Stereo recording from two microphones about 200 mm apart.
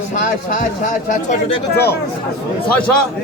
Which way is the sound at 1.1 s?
30° left (ahead or behind).